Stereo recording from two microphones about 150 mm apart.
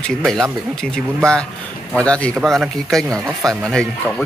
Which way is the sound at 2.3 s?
5° right (ahead or behind).